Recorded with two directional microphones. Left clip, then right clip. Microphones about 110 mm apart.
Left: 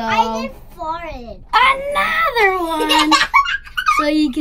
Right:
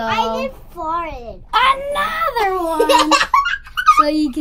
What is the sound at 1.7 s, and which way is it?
Speech, 15° left (ahead or behind).